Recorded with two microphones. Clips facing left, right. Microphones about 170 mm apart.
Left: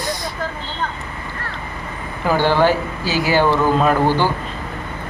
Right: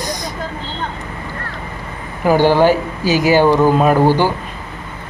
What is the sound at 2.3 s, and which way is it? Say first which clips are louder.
Speech: right 4 dB; 15° right (ahead or behind).